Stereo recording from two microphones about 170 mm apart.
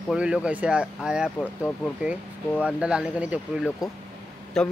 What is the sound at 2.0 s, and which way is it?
A man's voice, 5° right (ahead or behind).